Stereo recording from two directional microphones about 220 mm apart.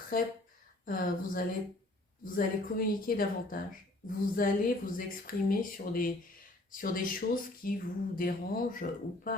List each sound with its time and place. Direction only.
0.1 s speech: 40° left (ahead or behind)